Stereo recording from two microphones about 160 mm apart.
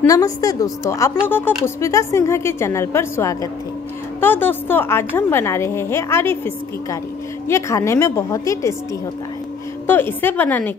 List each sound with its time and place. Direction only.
0.0 s a woman's voice: 20° left (ahead or behind)
9.8 s a woman's voice: 15° left (ahead or behind)